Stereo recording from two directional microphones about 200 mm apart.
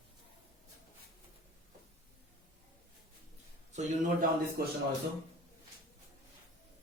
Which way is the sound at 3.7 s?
35° right (ahead or behind).